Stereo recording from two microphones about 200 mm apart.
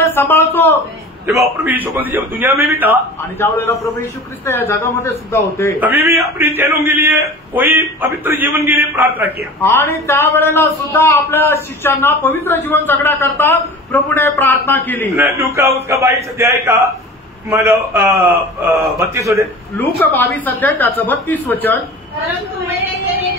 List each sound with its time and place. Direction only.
0.0 s speech: 10° left (ahead or behind)
1.2 s a man's voice: 15° right (ahead or behind)
3.2 s a man's voice: 10° left (ahead or behind)
5.8 s a man's voice: 10° right (ahead or behind)
9.6 s a man's voice: 10° left (ahead or behind)
15.1 s a man's voice: 15° right (ahead or behind)
20.0 s a man's voice: 10° left (ahead or behind)